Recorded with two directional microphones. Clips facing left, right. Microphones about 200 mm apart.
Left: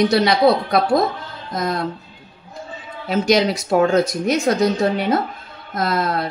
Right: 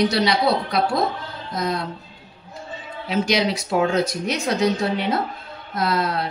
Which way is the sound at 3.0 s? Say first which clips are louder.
Left 4 dB; 45° left (ahead or behind).